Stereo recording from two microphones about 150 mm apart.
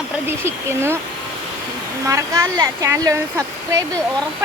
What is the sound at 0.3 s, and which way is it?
Speech, 15° right (ahead or behind).